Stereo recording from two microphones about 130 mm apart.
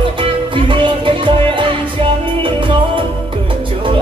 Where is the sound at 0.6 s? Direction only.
40° right (ahead or behind).